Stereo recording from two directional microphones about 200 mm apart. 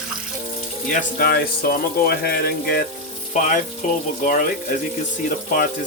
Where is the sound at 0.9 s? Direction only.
45° left (ahead or behind).